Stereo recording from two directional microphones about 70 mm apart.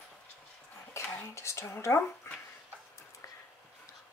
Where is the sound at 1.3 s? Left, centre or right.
Left.